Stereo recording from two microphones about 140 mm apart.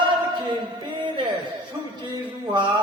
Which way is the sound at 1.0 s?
35° right (ahead or behind).